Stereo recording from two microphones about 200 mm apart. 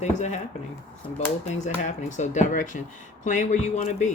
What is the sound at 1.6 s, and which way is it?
Speech, 35° left (ahead or behind).